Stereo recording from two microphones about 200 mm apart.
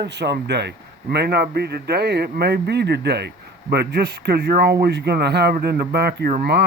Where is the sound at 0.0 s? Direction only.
55° right (ahead or behind).